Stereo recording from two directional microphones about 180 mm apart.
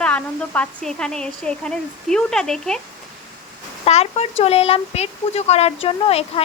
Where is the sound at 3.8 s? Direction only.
35° left (ahead or behind).